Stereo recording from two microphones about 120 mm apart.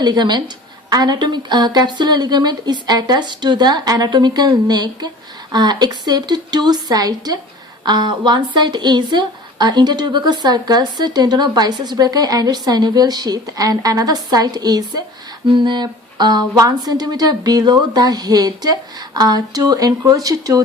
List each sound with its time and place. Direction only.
0.0 s a woman's voice: 35° right (ahead or behind)